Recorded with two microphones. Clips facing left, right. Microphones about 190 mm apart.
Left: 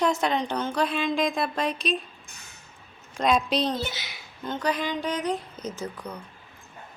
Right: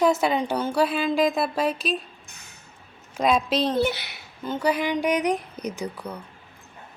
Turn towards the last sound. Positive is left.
turn(degrees=-10)  # may be behind; listen again after turning